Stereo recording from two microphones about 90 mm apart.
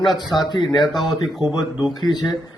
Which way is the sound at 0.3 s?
55° left (ahead or behind).